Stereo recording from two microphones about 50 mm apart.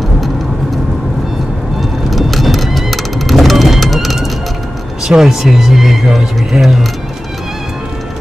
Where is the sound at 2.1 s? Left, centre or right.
Centre.